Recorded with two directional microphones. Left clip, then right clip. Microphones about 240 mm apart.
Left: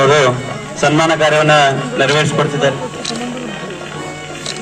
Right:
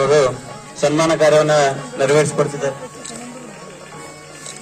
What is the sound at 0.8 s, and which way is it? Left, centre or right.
A man's voice, right.